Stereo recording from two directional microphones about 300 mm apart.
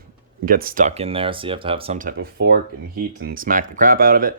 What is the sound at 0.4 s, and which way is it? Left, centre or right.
Speech, right.